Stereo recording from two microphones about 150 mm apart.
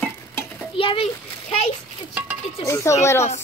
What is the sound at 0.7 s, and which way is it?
Speech, 35° left (ahead or behind).